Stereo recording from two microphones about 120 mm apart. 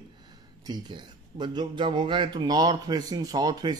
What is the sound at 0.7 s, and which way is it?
Speech, 40° right (ahead or behind).